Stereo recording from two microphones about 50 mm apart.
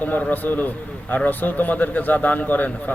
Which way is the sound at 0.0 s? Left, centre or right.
Left.